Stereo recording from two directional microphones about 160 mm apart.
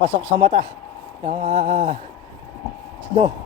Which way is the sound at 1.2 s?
40° right (ahead or behind).